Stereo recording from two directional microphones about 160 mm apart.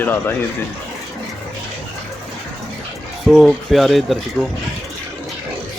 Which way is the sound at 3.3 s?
Centre (ahead or behind).